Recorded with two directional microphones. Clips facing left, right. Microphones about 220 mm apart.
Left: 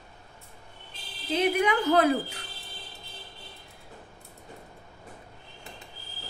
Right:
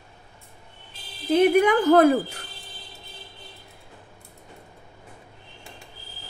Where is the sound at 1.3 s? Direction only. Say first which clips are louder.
Right 7 dB; 55° right (ahead or behind).